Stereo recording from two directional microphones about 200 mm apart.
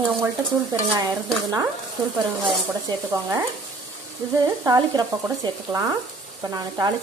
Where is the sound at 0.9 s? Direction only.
20° right (ahead or behind).